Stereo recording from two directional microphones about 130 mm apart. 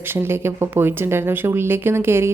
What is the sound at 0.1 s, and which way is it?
Speech, 20° right (ahead or behind).